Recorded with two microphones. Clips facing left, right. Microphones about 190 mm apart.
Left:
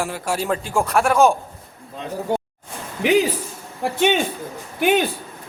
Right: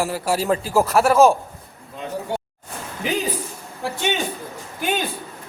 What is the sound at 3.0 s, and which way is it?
Speech, 80° left.